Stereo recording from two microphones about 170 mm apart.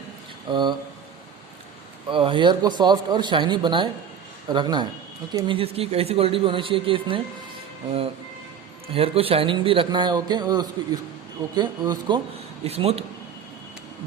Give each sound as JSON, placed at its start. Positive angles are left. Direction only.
{"t": 0.4, "sound": "speech", "side_deg": -25}
{"t": 2.0, "sound": "speech", "side_deg": -30}
{"t": 8.9, "sound": "speech", "side_deg": -35}
{"t": 12.6, "sound": "speech", "side_deg": -35}